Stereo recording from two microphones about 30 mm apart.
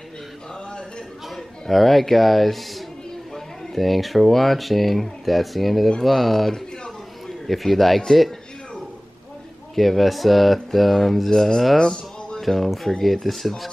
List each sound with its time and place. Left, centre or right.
1.3 s speech: centre
9.8 s speech: centre
11.8 s music: left
12.4 s speech: centre